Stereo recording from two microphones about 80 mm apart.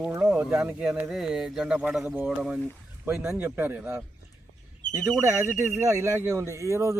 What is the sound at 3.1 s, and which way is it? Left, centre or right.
Speech, right.